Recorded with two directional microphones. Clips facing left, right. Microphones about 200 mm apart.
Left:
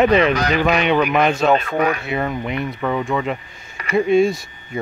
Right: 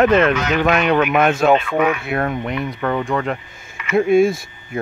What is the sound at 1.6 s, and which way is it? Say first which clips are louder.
Speech: right 1 dB; 40° left (ahead or behind).